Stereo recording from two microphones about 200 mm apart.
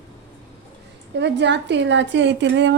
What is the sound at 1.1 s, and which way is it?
A woman's voice, 60° right (ahead or behind).